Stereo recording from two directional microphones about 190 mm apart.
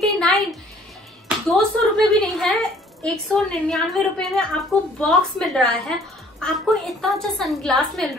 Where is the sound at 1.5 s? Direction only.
Centre (ahead or behind).